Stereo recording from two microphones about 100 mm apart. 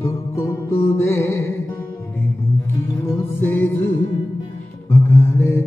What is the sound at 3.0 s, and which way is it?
Music, 20° left (ahead or behind).